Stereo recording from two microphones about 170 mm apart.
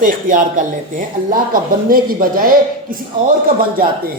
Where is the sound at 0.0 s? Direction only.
50° right (ahead or behind).